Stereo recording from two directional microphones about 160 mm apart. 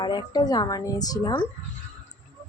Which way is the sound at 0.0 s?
25° left (ahead or behind).